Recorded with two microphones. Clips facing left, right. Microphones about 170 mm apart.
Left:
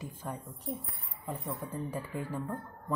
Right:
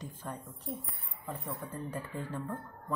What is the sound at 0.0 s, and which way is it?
A woman's voice, 10° left (ahead or behind).